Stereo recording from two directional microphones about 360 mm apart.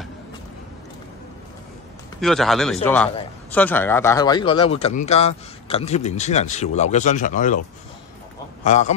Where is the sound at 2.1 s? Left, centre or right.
Centre; by 7.6 s left.